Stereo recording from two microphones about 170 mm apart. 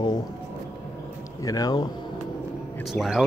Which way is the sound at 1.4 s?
20° left (ahead or behind).